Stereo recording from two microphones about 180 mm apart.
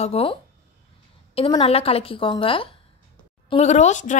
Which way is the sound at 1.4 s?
30° left (ahead or behind).